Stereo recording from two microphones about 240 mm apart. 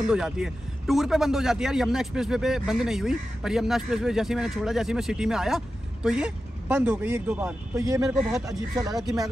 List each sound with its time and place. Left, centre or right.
0.0 s a man's voice: centre
8.1 s a man's voice: centre
8.5 s speech: centre